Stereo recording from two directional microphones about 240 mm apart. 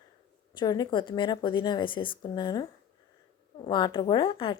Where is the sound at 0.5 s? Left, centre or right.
Centre.